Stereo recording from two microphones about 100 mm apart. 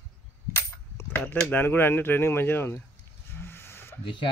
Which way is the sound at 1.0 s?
20° left (ahead or behind).